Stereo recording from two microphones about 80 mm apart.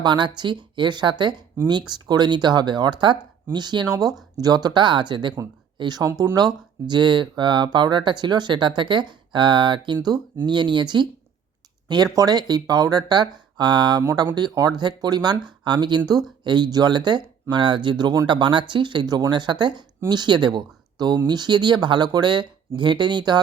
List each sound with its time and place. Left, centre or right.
0.0 s speech: right
5.7 s speech: right
12.1 s speech: right
17.5 s speech: right
18.3 s speech: right